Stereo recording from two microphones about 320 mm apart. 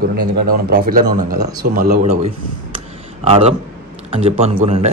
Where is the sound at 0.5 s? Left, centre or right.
Right.